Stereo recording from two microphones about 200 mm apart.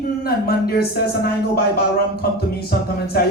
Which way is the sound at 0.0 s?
50° left (ahead or behind).